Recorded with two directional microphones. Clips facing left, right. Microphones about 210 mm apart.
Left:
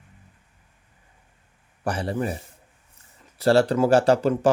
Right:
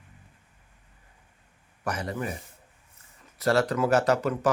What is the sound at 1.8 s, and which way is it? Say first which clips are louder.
Speech: left 5 dB; 30° left (ahead or behind).